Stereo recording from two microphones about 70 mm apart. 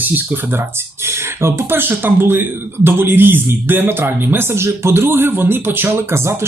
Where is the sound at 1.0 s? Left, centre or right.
Right.